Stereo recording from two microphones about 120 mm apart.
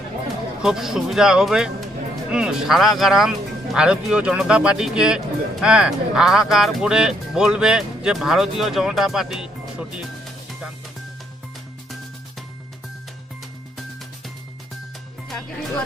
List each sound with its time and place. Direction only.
0.6 s speech: 5° right (ahead or behind)